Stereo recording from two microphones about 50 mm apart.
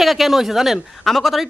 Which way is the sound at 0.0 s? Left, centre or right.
Centre.